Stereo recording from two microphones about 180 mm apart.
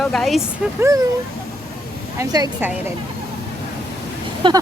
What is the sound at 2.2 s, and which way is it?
Speech, 20° right (ahead or behind).